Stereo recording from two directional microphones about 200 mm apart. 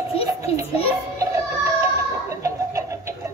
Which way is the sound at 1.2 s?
15° right (ahead or behind).